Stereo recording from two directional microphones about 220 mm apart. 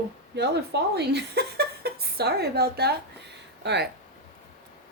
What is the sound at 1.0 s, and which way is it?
A woman's voice, 50° right (ahead or behind).